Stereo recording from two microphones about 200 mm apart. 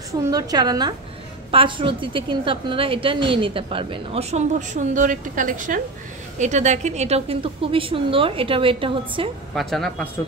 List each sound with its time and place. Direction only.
0.3 s a woman's voice: 20° right (ahead or behind)
9.6 s speech: centre (ahead or behind)